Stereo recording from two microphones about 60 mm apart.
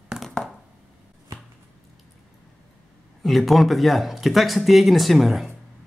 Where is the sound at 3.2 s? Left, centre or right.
Centre.